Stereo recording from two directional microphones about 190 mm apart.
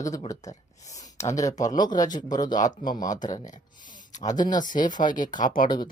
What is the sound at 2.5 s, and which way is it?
Speech, 45° left (ahead or behind).